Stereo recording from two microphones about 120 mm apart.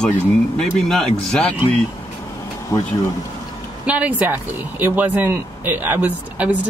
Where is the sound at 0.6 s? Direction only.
5° left (ahead or behind).